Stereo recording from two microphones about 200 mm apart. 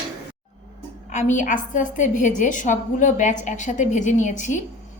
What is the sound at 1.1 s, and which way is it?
A woman's voice, 35° left (ahead or behind).